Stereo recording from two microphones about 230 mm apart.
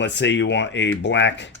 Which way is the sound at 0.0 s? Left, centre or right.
Left.